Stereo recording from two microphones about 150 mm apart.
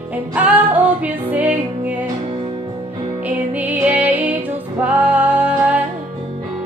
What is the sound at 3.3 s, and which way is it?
Music, 10° right (ahead or behind).